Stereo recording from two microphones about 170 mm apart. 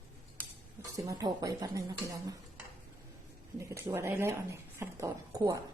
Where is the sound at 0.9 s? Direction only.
20° right (ahead or behind).